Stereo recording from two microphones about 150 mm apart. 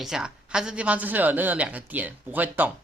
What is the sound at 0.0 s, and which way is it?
Speech, 5° right (ahead or behind).